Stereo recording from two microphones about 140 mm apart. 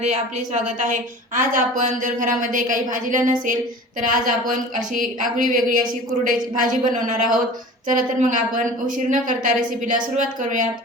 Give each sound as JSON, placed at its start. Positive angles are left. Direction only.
{"t": 0.0, "sound": "a woman's voice", "side_deg": -55}